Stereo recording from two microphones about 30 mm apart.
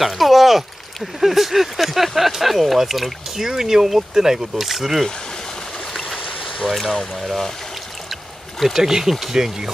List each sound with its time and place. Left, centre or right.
0.0 s a sound: centre
1.2 s speech: centre
4.6 s speech: centre
6.6 s speech: centre
8.1 s a sound: centre
8.7 s speech: centre